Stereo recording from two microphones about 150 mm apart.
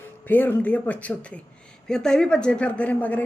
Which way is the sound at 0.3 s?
10° left (ahead or behind).